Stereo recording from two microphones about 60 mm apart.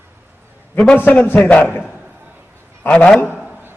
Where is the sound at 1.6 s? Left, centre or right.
Left.